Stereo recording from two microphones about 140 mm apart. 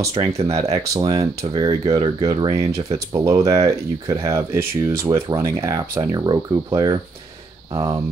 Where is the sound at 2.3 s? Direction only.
40° right (ahead or behind).